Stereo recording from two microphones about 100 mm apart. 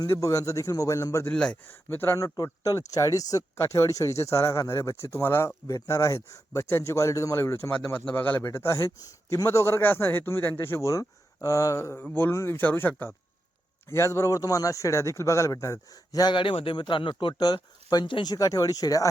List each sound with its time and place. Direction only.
0.1 s a man's voice: 30° left (ahead or behind)
1.3 s speech: 10° left (ahead or behind)
1.6 s a man's voice: 20° left (ahead or behind); by 16.3 s 40° left (ahead or behind)
16.3 s speech: 60° left (ahead or behind); by 19.0 s 35° left (ahead or behind)